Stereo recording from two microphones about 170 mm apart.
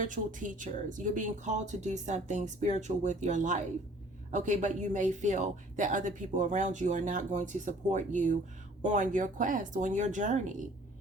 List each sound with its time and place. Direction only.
0.0 s speech: 50° right (ahead or behind)